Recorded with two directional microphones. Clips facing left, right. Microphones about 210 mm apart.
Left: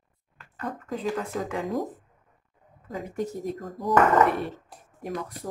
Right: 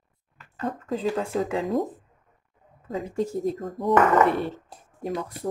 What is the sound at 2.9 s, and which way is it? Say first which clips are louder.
Speech: right 4 dB; 30° right (ahead or behind).